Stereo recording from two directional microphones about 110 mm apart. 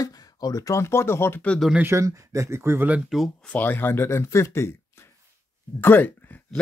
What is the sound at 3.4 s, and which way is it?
Speech, 15° left (ahead or behind).